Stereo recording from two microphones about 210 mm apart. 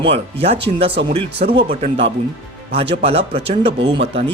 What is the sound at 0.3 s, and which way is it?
Speech, 30° right (ahead or behind).